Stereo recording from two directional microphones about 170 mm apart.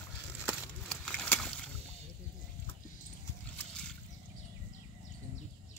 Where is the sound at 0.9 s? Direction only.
5° left (ahead or behind).